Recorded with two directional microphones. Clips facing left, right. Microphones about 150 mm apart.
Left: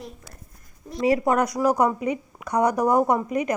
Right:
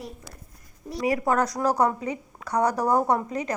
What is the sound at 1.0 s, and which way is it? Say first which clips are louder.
A woman's voice: left 3 dB; 20° left (ahead or behind).